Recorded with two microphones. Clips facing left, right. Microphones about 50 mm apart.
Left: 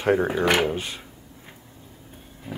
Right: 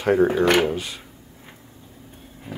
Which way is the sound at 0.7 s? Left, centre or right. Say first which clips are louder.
Right 1 dB; left.